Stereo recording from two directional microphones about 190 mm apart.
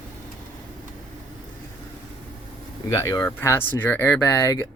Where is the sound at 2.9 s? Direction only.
15° left (ahead or behind).